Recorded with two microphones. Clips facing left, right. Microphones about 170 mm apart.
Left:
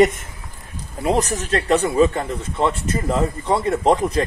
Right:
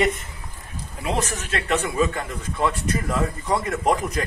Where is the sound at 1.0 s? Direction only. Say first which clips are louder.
Left 6 dB; 35° left (ahead or behind).